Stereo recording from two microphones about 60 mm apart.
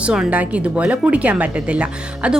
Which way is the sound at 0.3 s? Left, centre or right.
Right.